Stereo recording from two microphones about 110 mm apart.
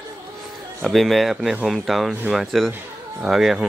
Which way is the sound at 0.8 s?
Centre (ahead or behind).